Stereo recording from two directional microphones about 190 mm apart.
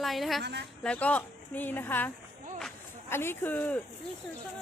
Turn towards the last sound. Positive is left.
turn(degrees=10)  # may be behind; listen again after turning